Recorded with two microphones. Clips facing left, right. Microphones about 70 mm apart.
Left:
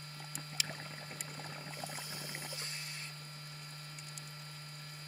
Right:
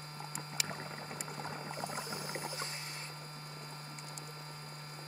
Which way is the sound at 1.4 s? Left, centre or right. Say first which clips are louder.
Right 5 dB; right.